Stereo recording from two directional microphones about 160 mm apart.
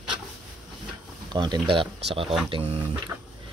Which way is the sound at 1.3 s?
30° right (ahead or behind).